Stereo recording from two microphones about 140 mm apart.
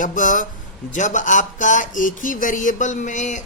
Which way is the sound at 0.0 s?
65° left (ahead or behind).